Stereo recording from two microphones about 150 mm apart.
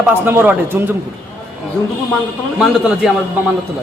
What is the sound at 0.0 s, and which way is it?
Speech, 15° right (ahead or behind).